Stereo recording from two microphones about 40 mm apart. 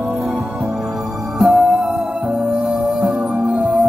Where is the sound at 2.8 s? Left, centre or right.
Right.